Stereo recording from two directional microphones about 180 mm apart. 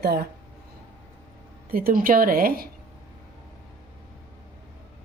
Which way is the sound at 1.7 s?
50° right (ahead or behind).